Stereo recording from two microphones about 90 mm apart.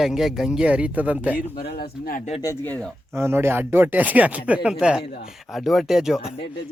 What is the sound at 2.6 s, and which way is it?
Speech, 20° left (ahead or behind).